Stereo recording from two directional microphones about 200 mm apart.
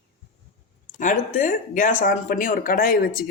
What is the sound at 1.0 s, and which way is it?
Speech, 40° left (ahead or behind).